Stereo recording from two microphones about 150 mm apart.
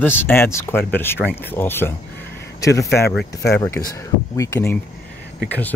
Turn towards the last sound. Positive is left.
turn(degrees=10)  # may be behind; listen again after turning